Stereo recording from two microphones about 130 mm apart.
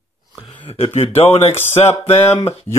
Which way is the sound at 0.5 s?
45° left (ahead or behind).